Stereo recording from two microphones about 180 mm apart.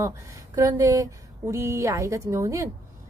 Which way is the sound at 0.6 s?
20° right (ahead or behind).